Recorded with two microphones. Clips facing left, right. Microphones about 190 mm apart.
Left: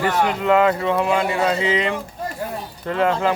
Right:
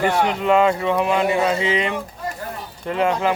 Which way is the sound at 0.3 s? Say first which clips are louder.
Left 2 dB; 25° right (ahead or behind).